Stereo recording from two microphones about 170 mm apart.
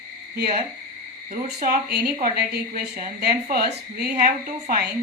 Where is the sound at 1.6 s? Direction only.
65° right (ahead or behind).